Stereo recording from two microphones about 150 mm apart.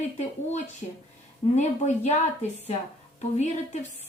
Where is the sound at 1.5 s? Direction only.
50° left (ahead or behind).